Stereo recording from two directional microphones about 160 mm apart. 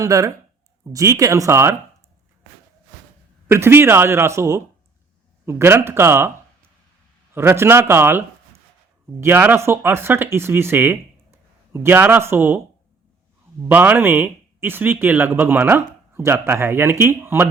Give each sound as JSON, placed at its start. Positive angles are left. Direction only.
{"t": 0.0, "sound": "speech", "side_deg": -20}
{"t": 3.4, "sound": "speech", "side_deg": -15}
{"t": 7.3, "sound": "speech", "side_deg": -15}
{"t": 9.2, "sound": "speech", "side_deg": -10}
{"t": 13.7, "sound": "speech", "side_deg": -10}